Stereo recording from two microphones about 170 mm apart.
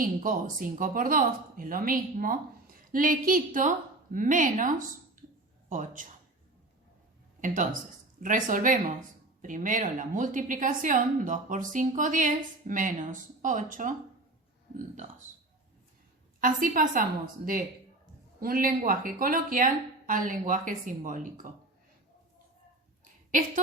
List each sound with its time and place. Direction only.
0.0 s speech: 55° right (ahead or behind)
7.4 s speech: 50° right (ahead or behind)
16.4 s a woman's voice: 55° right (ahead or behind)